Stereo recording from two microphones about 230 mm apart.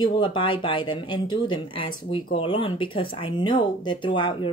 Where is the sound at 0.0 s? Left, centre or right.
Left.